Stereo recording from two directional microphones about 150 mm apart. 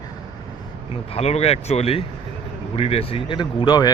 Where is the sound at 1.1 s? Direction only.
45° left (ahead or behind); by 3.9 s 30° left (ahead or behind).